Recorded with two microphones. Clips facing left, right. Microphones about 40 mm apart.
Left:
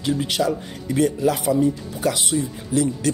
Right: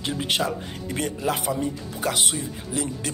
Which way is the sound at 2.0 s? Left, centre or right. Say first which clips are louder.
Left 2 dB; right.